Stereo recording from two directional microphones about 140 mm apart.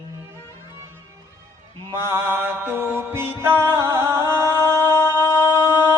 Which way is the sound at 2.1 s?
15° right (ahead or behind).